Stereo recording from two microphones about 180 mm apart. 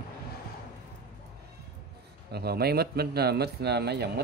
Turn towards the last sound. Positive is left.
turn(degrees=-65)  # may be behind; listen again after turning